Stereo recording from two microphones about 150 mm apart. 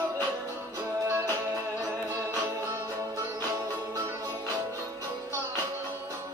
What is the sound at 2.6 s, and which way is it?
Music, 20° right (ahead or behind).